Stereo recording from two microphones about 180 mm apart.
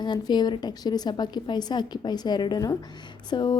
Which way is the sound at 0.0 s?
25° left (ahead or behind).